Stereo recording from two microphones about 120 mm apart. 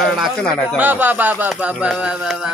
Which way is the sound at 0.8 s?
15° right (ahead or behind).